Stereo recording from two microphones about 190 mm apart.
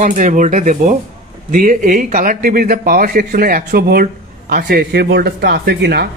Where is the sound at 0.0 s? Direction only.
40° right (ahead or behind).